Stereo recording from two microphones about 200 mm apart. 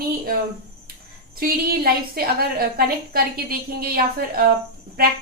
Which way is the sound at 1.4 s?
50° right (ahead or behind).